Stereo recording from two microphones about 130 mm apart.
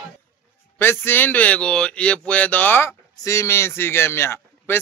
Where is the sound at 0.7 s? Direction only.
15° left (ahead or behind).